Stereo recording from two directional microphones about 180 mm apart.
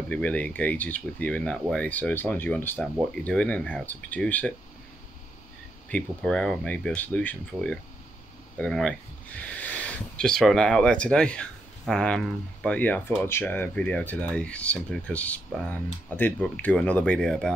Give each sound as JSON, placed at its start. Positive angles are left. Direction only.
{"t": 0.1, "sound": "speech", "side_deg": 10}
{"t": 5.9, "sound": "speech", "side_deg": 5}